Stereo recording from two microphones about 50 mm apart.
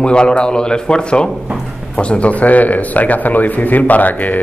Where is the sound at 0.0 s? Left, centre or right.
Centre.